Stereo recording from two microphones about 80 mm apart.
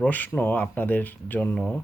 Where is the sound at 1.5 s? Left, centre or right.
Centre.